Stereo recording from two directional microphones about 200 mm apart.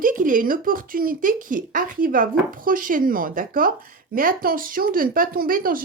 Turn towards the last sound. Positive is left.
turn(degrees=-45)  # may be behind; listen again after turning